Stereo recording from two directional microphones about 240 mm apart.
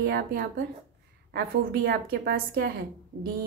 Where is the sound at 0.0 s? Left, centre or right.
Right.